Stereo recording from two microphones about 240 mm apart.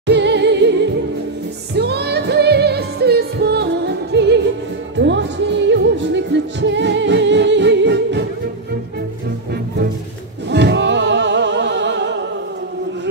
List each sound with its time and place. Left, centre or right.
0.0 s music: right
10.5 s music: right